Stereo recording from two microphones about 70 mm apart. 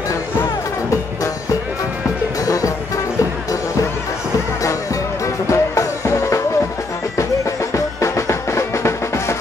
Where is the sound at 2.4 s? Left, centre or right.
Left.